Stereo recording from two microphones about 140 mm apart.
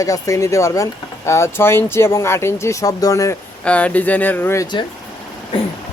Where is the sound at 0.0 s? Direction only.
25° left (ahead or behind).